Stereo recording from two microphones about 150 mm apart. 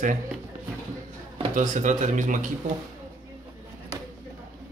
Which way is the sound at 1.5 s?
55° right (ahead or behind).